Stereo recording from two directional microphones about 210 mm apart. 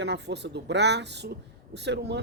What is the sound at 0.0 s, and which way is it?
A woman's voice, 55° right (ahead or behind).